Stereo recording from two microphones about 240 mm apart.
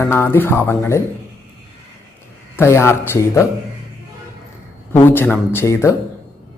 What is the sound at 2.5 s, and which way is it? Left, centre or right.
Speech, centre.